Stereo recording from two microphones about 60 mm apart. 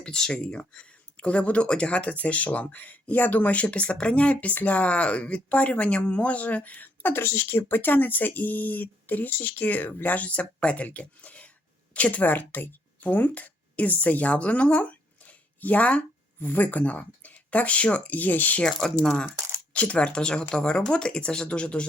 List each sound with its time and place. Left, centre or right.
0.0 s speech: centre
18.6 s speech: centre